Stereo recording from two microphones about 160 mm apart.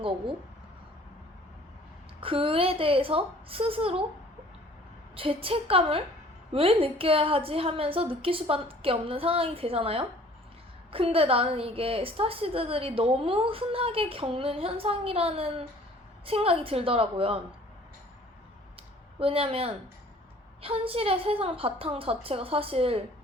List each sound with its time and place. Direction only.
2.2 s a woman's voice: 35° right (ahead or behind)
5.1 s a woman's voice: 35° right (ahead or behind)
19.2 s a woman's voice: 35° right (ahead or behind)